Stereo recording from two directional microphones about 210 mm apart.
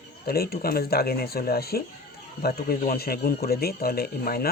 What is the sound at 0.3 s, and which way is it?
Speech, 45° left (ahead or behind).